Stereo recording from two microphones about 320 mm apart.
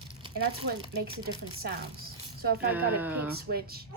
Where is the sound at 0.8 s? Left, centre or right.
Centre.